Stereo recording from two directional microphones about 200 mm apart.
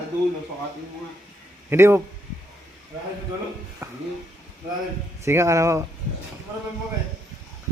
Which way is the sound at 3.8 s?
15° right (ahead or behind).